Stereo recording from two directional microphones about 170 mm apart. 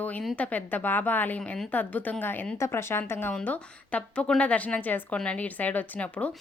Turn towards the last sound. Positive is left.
turn(degrees=10)  # may be behind; listen again after turning